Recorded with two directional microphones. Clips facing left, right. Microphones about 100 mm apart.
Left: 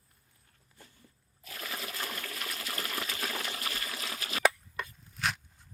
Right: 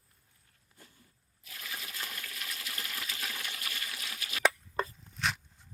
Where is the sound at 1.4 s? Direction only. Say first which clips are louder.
Left 4 dB; 50° left (ahead or behind).